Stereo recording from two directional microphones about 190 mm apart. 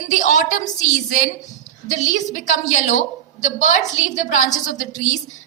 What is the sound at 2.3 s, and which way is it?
A woman's voice, 40° left (ahead or behind).